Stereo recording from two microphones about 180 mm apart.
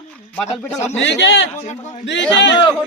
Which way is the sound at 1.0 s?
75° left (ahead or behind).